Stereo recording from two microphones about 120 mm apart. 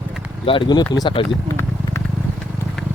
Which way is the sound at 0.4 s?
45° left (ahead or behind).